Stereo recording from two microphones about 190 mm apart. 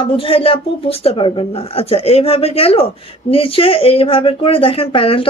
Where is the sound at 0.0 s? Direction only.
30° left (ahead or behind).